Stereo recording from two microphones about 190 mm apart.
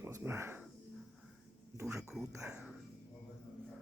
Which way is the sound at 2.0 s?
5° right (ahead or behind).